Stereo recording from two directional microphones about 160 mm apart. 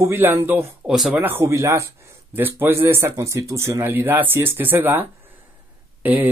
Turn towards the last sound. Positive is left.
turn(degrees=-10)  # may be behind; listen again after turning